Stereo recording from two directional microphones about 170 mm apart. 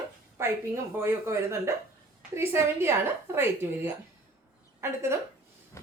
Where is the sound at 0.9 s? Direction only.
15° right (ahead or behind).